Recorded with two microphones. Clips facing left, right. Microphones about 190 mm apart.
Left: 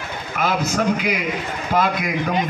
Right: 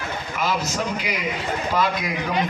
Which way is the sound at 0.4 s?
50° left (ahead or behind).